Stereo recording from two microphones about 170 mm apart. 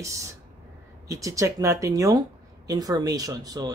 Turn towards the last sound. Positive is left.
turn(degrees=-20)  # may be behind; listen again after turning